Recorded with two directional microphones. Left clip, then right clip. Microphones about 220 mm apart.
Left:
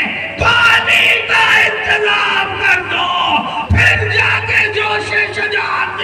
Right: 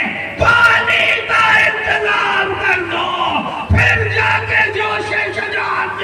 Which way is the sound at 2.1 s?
50° left (ahead or behind).